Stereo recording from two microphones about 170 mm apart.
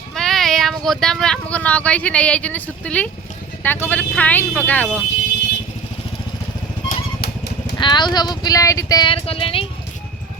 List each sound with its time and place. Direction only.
0.1 s speech: centre (ahead or behind)
6.8 s vehicle: 65° left (ahead or behind)
7.8 s a sound: 25° left (ahead or behind)